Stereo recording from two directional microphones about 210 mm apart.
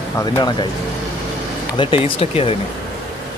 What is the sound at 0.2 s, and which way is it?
Speech, 20° left (ahead or behind).